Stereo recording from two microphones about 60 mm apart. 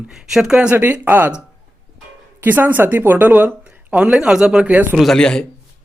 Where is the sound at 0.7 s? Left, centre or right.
Right.